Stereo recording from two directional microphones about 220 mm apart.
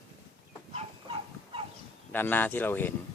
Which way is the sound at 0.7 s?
25° right (ahead or behind).